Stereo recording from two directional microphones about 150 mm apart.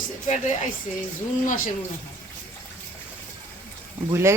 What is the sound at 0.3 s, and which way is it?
Speech, 55° left (ahead or behind).